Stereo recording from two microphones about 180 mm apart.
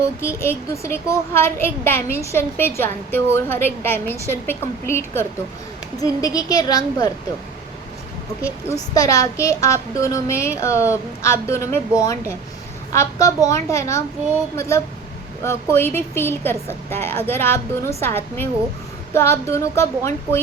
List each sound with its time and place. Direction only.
0.0 s a child's voice: 15° left (ahead or behind)
8.6 s a child's voice: 20° left (ahead or behind)
12.9 s a child's voice: 15° left (ahead or behind)